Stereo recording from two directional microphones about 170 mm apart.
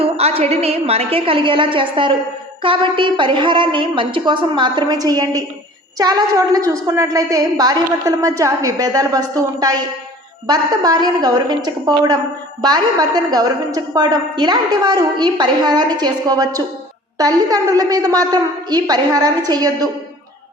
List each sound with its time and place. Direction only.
0.0 s a woman's voice: 35° right (ahead or behind)